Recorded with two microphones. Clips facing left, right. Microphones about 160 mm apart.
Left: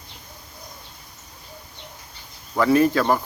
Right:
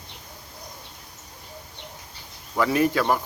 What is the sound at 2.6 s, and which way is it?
Speech, 15° right (ahead or behind).